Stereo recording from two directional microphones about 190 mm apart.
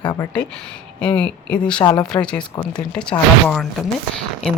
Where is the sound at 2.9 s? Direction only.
5° left (ahead or behind).